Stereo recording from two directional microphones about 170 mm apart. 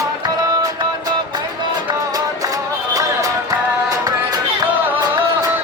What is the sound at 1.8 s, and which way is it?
Music, 20° right (ahead or behind).